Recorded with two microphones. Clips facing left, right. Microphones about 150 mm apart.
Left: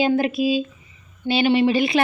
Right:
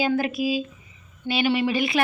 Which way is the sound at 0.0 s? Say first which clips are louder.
Left 4 dB; 25° left (ahead or behind).